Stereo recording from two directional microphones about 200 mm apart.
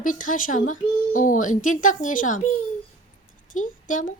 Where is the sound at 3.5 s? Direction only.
40° left (ahead or behind).